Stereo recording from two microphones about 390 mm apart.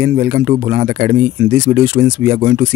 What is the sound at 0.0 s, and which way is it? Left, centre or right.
Speech, right.